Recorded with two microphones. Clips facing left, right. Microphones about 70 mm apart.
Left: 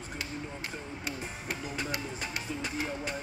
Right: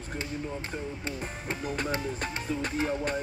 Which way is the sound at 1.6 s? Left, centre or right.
Right.